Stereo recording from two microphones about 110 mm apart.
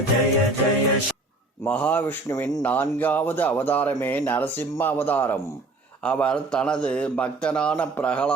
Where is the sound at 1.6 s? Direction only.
15° left (ahead or behind).